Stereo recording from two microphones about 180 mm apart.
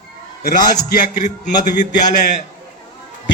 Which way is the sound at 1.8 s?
45° left (ahead or behind).